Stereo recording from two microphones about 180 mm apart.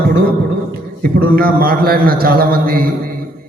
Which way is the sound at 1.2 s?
55° right (ahead or behind).